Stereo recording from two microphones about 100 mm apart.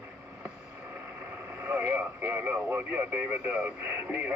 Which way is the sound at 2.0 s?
15° right (ahead or behind).